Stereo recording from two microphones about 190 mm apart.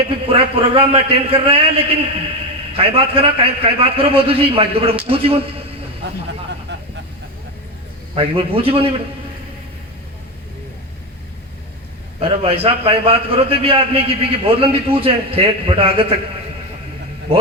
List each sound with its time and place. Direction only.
0.3 s a man's voice: 30° right (ahead or behind)
6.7 s vehicle: 65° right (ahead or behind)
8.1 s a man's voice: 30° right (ahead or behind)
12.2 s a man's voice: 30° right (ahead or behind)